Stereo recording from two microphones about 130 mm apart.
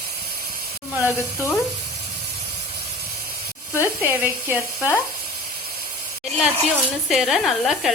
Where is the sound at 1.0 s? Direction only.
20° left (ahead or behind).